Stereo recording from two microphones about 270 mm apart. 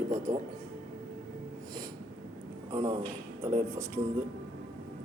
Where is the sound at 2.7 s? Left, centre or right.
Centre.